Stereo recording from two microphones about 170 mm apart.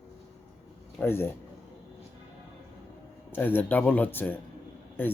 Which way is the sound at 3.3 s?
10° left (ahead or behind).